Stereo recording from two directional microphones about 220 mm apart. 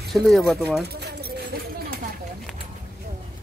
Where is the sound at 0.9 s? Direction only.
45° right (ahead or behind).